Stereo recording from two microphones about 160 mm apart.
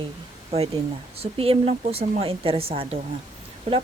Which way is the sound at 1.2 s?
35° right (ahead or behind).